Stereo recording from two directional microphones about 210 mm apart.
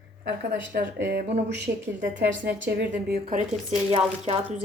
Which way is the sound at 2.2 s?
55° right (ahead or behind).